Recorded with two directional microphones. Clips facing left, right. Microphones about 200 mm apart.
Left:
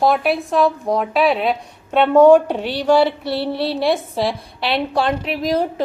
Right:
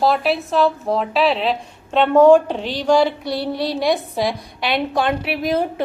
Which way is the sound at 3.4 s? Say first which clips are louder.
Left 1 dB; 15° right (ahead or behind).